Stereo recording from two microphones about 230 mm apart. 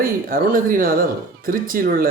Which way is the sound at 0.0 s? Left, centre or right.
Right.